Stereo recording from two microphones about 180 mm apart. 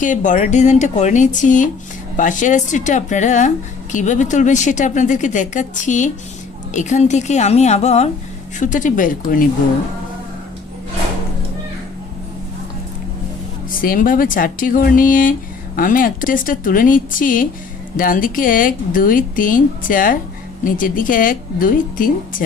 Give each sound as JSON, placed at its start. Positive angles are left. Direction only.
{"t": 0.0, "sound": "a woman's voice", "side_deg": 45}
{"t": 13.7, "sound": "speech", "side_deg": 50}